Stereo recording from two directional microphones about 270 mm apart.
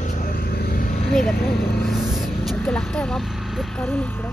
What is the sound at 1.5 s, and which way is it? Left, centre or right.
Speech, left.